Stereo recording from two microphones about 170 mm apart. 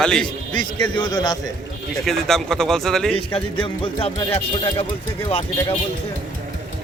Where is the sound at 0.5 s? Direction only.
25° left (ahead or behind).